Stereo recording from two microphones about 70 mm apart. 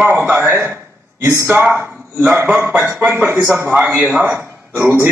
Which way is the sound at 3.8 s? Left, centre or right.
Right.